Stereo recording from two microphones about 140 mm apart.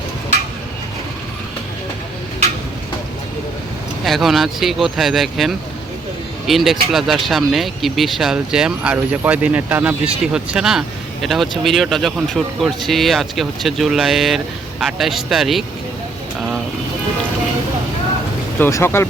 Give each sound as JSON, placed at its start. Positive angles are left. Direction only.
{"t": 4.0, "sound": "speech", "side_deg": 0}
{"t": 18.6, "sound": "speech", "side_deg": 15}